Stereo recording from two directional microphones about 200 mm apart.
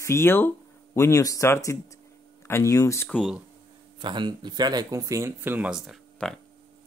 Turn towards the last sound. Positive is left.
turn(degrees=0)  # may be behind; listen again after turning